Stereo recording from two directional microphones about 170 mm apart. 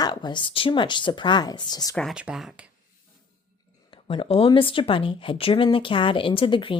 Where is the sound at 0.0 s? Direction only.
25° left (ahead or behind).